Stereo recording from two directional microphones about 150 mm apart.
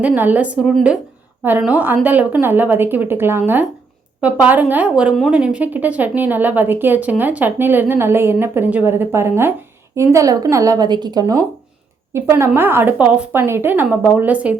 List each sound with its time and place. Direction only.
0.0 s a woman's voice: 10° right (ahead or behind)